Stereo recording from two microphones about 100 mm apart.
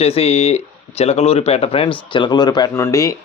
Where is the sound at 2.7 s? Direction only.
30° left (ahead or behind).